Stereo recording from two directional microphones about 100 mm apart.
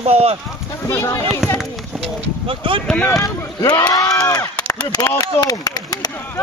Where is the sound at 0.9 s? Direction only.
30° left (ahead or behind).